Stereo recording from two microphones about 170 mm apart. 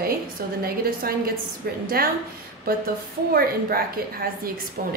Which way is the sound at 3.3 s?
65° right (ahead or behind).